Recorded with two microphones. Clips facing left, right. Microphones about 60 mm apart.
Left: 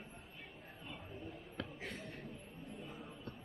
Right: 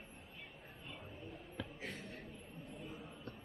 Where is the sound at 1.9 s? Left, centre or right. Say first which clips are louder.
Left 1 dB; centre.